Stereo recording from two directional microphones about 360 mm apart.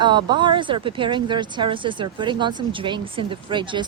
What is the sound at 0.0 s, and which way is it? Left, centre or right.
Speech, centre.